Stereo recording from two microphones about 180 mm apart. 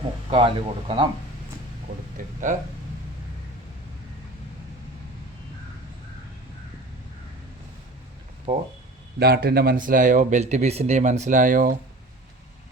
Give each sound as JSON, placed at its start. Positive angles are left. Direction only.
{"t": 0.3, "sound": "speech", "side_deg": -30}
{"t": 2.1, "sound": "speech", "side_deg": -45}
{"t": 8.5, "sound": "speech", "side_deg": -35}
{"t": 9.1, "sound": "speech", "side_deg": -60}